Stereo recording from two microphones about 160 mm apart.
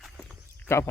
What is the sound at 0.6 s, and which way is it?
Speech, 15° left (ahead or behind).